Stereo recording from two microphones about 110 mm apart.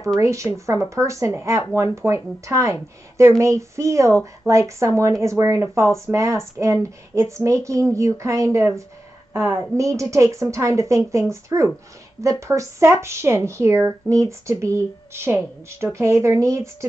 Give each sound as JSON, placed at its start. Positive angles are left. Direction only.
{"t": 0.2, "sound": "a woman's voice", "side_deg": -25}